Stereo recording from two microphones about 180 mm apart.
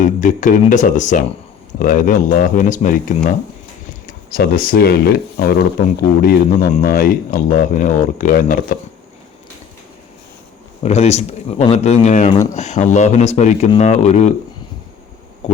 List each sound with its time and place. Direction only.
0.0 s speech: 45° left (ahead or behind)
10.8 s speech: 40° left (ahead or behind)
15.4 s a sound: 35° left (ahead or behind)